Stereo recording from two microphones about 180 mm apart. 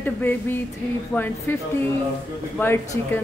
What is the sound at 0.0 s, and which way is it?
A woman's voice, 10° left (ahead or behind).